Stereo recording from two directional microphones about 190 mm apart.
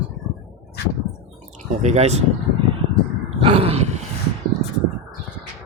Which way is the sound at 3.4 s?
30° right (ahead or behind).